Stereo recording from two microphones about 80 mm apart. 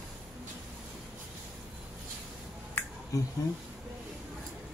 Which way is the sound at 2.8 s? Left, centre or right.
Left.